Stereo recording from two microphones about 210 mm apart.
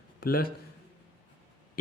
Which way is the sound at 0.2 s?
45° left (ahead or behind).